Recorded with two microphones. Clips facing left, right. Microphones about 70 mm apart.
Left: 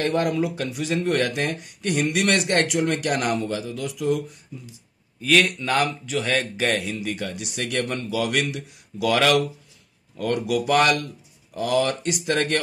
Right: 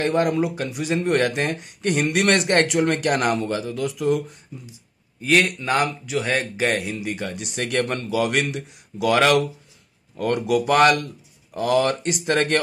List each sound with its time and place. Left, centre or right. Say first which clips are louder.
0.0 s speech: right 2 dB; right
5.2 s speech: right 1 dB; right